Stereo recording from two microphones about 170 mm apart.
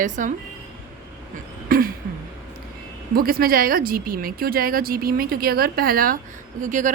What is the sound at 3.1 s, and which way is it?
Speech, 60° right (ahead or behind).